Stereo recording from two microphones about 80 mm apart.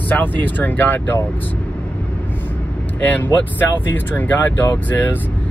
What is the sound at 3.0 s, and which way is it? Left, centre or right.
Speech, left.